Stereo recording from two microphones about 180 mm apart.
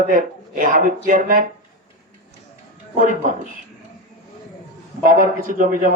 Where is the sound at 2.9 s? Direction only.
45° right (ahead or behind).